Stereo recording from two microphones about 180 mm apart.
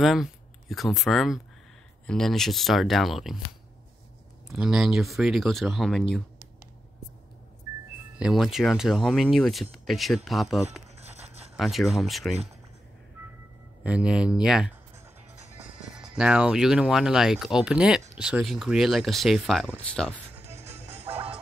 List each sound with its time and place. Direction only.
0.0 s speech: centre (ahead or behind)
4.5 s speech: 5° right (ahead or behind)
8.2 s speech: centre (ahead or behind)
11.0 s a sound: 35° right (ahead or behind)
11.5 s speech: centre (ahead or behind)
13.8 s speech: 5° right (ahead or behind)
16.2 s speech: 5° right (ahead or behind)
20.3 s music: 35° right (ahead or behind)